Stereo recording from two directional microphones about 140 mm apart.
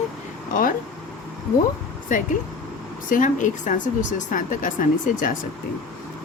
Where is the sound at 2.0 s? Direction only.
70° left (ahead or behind).